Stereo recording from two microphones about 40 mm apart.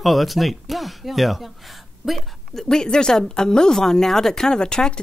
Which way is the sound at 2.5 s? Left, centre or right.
Centre.